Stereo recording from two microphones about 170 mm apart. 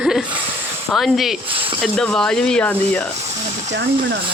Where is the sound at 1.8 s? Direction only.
5° left (ahead or behind).